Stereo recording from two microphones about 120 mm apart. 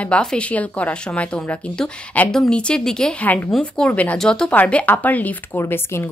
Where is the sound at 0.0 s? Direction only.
5° left (ahead or behind).